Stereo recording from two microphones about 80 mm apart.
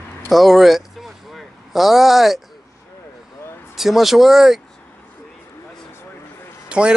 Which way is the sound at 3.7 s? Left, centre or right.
Centre.